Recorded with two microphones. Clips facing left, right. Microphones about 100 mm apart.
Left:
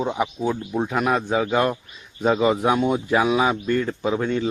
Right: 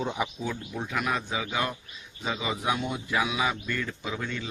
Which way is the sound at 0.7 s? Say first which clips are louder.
Left 8 dB; 40° left (ahead or behind).